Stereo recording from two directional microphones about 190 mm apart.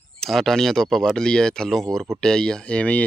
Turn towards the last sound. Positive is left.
turn(degrees=5)  # may be behind; listen again after turning